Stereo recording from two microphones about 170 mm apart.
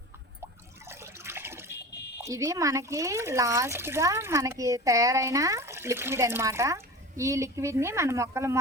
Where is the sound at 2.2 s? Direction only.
20° right (ahead or behind).